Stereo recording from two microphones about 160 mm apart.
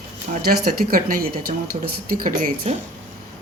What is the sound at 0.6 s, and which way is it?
Speech, 65° right (ahead or behind).